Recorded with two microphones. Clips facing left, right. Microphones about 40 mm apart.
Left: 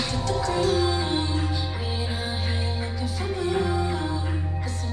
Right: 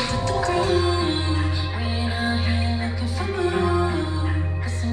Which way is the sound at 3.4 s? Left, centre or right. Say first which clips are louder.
Right 4 dB; right.